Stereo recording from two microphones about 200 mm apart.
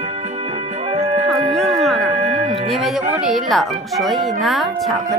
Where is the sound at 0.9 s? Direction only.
30° right (ahead or behind).